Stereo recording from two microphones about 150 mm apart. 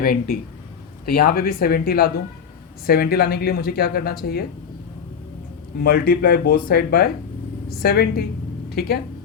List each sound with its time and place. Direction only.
0.0 s speech: 75° left (ahead or behind)
5.8 s speech: 85° left